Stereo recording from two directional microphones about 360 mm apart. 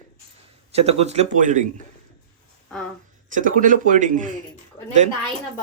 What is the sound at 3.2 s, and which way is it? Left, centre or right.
A man's voice, right.